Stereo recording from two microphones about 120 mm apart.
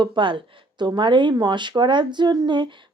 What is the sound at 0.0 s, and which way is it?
Speech, 40° right (ahead or behind).